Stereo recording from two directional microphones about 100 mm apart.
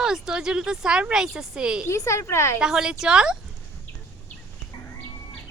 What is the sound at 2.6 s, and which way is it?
Speech, 5° right (ahead or behind).